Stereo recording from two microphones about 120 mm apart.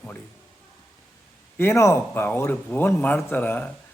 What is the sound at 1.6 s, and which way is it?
A man's voice, 20° left (ahead or behind).